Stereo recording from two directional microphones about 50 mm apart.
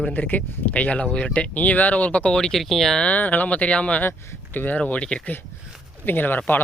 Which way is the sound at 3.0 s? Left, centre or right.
Left.